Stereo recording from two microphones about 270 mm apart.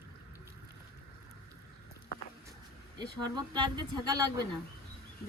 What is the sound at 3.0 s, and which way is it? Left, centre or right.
Speech, centre.